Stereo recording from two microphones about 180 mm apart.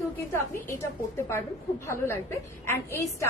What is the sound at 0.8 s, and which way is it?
Speech, 15° left (ahead or behind).